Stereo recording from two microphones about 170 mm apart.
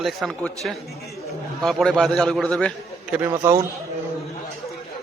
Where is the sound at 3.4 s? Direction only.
15° right (ahead or behind).